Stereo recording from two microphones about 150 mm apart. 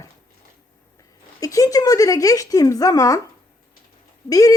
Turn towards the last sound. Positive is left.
turn(degrees=25)  # may be behind; listen again after turning